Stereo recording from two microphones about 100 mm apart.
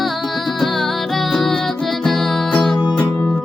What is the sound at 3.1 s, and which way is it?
Music, 15° left (ahead or behind).